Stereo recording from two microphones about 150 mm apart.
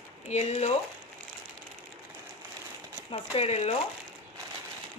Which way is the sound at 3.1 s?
45° left (ahead or behind).